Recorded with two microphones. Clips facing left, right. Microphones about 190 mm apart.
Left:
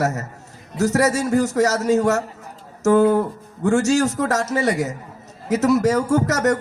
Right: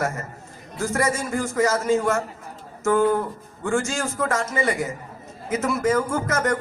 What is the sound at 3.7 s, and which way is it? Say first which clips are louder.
A man's voice: left 7 dB; 70° left (ahead or behind).